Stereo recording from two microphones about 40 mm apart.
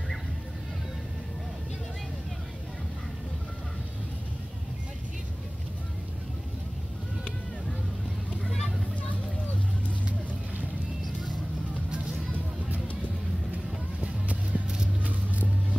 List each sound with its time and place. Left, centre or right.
14.0 s music: right